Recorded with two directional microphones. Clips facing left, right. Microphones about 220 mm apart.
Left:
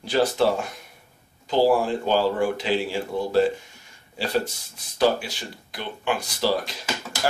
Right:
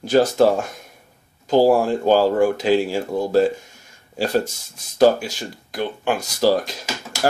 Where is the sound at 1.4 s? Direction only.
45° right (ahead or behind).